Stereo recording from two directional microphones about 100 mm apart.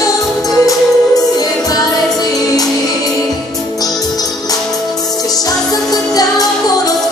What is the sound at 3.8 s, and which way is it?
Music, 40° left (ahead or behind).